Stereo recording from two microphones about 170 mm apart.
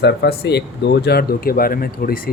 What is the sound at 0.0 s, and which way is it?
Speech, 75° left (ahead or behind).